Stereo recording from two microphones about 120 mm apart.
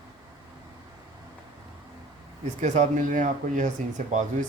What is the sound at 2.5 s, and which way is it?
Speech, 80° right.